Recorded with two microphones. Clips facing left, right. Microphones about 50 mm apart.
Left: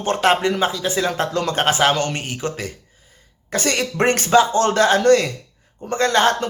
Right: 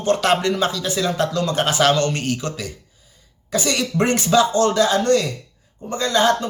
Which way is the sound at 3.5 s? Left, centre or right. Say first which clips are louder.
Even; left.